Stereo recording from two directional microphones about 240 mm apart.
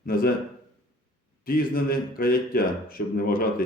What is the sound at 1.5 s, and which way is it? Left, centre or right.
Speech, left.